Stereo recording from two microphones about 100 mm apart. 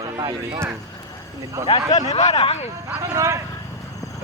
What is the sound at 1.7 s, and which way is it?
Speech, 75° left (ahead or behind).